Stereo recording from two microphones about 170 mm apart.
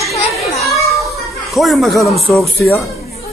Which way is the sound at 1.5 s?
Centre (ahead or behind).